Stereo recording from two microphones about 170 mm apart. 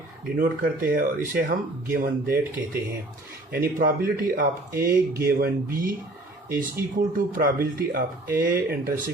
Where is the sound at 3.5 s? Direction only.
55° right (ahead or behind).